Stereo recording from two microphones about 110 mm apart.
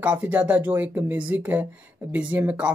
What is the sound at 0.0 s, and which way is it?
Speech, 15° right (ahead or behind).